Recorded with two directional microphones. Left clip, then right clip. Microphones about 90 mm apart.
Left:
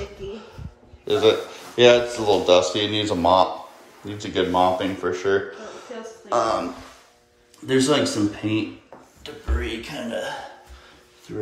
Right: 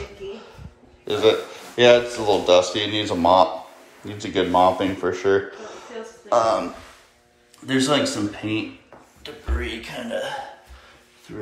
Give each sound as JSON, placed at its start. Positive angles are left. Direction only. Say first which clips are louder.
{"t": 1.0, "sound": "speech", "louder": "even", "side_deg": 50}
{"t": 4.7, "sound": "speech", "louder": "right 1 dB", "side_deg": 10}
{"t": 9.2, "sound": "speech", "louder": "even", "side_deg": 35}